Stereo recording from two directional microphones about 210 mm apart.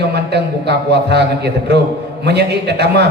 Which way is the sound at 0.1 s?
50° right (ahead or behind).